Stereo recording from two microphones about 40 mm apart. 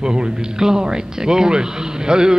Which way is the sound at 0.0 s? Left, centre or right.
Centre.